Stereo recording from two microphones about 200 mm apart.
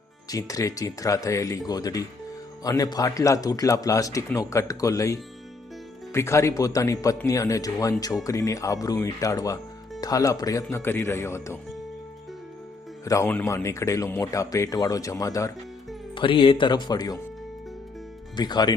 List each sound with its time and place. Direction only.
0.3 s a man's voice: 15° left (ahead or behind)
13.1 s a man's voice: 15° left (ahead or behind)
18.3 s speech: 20° left (ahead or behind)